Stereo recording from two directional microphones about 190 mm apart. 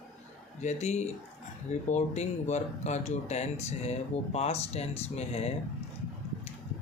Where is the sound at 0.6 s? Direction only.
35° left (ahead or behind).